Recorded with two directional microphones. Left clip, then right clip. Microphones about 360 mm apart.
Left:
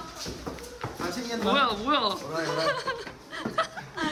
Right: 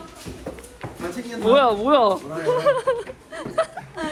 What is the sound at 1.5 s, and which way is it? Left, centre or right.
Speech, centre.